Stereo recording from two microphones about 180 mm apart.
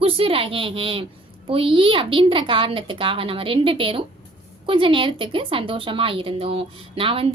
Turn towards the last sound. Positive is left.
turn(degrees=-30)  # may be behind; listen again after turning